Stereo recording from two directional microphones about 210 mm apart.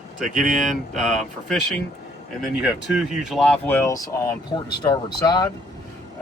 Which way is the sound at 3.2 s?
Centre (ahead or behind).